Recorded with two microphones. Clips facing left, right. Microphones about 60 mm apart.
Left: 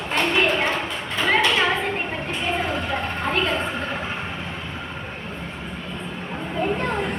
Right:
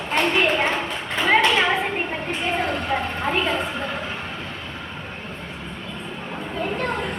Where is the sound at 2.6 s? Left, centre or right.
Right.